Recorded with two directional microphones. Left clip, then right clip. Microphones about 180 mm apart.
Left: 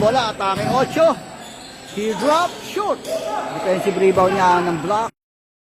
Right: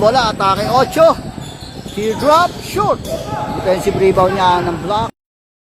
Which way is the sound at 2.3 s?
15° right (ahead or behind).